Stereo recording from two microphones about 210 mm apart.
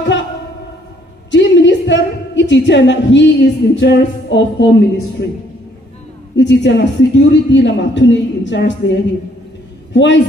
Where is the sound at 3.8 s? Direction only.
55° left (ahead or behind).